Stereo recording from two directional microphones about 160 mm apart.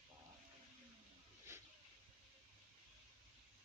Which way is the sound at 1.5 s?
15° right (ahead or behind).